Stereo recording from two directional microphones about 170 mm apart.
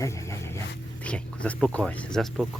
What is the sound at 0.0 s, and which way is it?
Dog, 15° left (ahead or behind).